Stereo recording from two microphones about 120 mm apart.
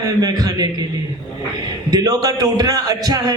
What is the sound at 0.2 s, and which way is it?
Speech, 30° right (ahead or behind).